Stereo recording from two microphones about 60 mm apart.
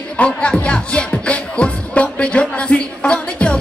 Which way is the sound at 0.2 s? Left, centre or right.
Left.